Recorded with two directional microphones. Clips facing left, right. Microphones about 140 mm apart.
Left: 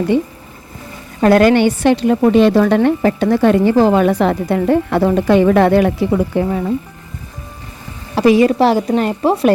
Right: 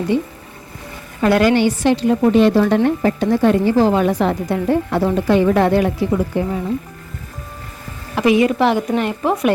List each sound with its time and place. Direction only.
1.2 s a woman's voice: 50° left (ahead or behind); by 6.5 s 65° left (ahead or behind)
8.1 s speech: 35° left (ahead or behind)